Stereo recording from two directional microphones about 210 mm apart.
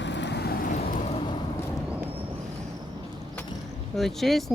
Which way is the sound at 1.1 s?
25° left (ahead or behind).